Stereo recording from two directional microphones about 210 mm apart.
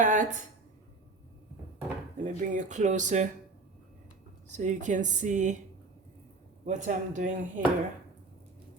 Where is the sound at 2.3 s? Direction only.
35° right (ahead or behind).